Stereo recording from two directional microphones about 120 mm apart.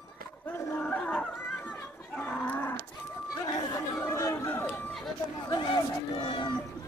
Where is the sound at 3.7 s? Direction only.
25° left (ahead or behind).